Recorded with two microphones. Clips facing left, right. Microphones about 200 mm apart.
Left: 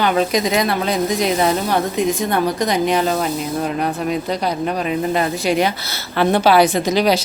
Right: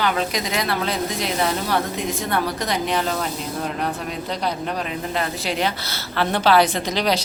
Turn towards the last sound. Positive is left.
turn(degrees=10)  # may be behind; listen again after turning